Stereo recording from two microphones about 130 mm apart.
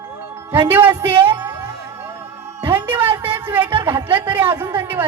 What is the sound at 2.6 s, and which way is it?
Speech, 15° right (ahead or behind).